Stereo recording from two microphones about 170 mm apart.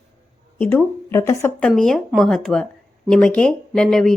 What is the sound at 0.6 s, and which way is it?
Speech, 15° left (ahead or behind).